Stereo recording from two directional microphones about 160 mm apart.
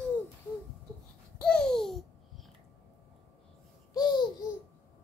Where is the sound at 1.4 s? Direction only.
5° left (ahead or behind).